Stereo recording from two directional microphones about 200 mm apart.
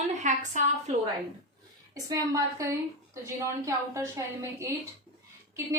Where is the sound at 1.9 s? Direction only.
15° right (ahead or behind).